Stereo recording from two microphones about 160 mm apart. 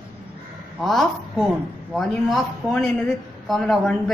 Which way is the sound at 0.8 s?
Centre (ahead or behind).